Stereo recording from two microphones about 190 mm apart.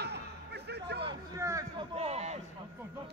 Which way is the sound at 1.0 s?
15° right (ahead or behind).